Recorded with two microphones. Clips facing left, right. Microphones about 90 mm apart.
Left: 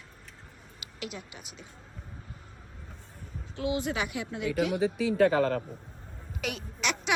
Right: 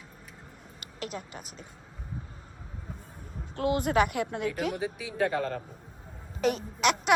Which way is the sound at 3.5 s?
50° right (ahead or behind).